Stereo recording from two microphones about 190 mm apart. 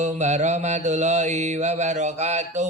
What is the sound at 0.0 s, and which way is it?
A man's voice, 35° right (ahead or behind).